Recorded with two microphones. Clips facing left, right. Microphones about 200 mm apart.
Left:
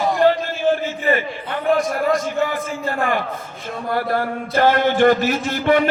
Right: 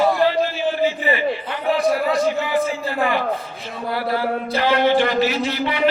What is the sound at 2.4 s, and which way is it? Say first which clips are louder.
Speech: right 3 dB; 50° left (ahead or behind).